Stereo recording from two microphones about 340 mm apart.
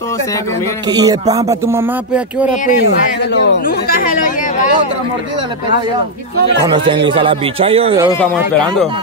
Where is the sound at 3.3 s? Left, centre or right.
Left.